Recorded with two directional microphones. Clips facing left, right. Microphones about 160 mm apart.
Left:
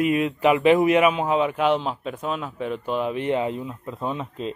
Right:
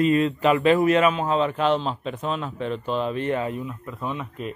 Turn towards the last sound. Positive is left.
turn(degrees=25)  # may be behind; listen again after turning